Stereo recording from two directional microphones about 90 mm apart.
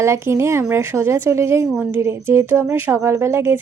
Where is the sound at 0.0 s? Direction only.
30° right (ahead or behind).